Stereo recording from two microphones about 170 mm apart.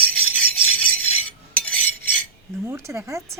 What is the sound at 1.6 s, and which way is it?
Cutlery, 10° left (ahead or behind).